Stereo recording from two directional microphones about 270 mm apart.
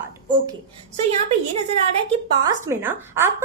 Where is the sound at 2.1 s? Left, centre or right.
Centre.